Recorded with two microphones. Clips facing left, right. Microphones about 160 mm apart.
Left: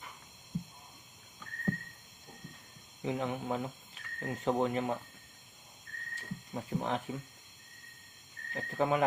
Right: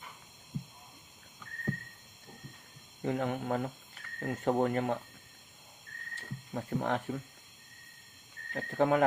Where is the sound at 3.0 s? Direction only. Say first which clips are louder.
Right 2 dB; 55° right (ahead or behind).